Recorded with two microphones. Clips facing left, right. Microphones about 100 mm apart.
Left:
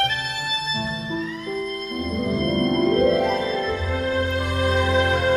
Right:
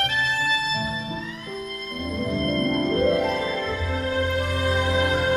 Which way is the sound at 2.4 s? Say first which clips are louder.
Left 3 dB; 30° left (ahead or behind).